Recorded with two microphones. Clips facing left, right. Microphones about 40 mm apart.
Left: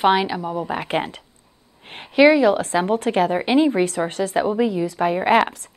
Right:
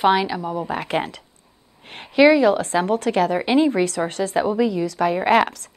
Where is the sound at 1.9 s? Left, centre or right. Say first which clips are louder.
Even; left.